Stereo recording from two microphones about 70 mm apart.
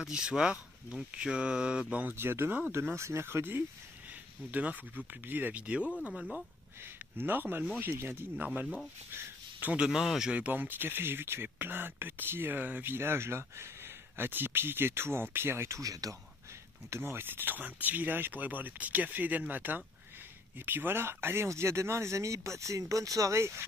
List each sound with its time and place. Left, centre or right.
0.0 s speech: centre
2.1 s speech: right
4.5 s speech: right
7.2 s speech: right
9.1 s a sound: right
9.8 s speech: centre
10.3 s speech: right
15.8 s speech: right
16.9 s speech: right